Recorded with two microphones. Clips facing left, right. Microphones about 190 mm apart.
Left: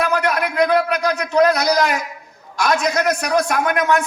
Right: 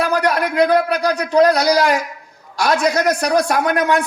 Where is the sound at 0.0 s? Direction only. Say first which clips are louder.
Right 2 dB; 35° right (ahead or behind).